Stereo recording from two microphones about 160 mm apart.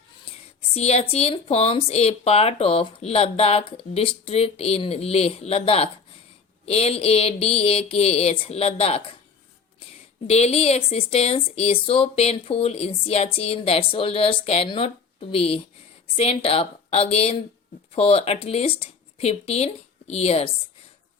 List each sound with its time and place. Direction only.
0.7 s speech: 40° left (ahead or behind)
10.2 s speech: 40° left (ahead or behind)